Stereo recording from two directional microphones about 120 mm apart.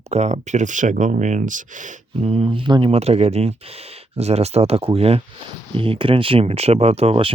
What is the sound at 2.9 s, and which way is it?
Speech, 60° right (ahead or behind).